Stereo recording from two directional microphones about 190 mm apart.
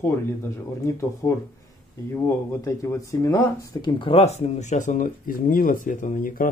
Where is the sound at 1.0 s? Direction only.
15° left (ahead or behind).